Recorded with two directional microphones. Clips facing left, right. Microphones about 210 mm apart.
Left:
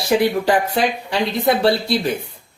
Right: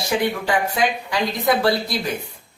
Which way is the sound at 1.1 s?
25° left (ahead or behind).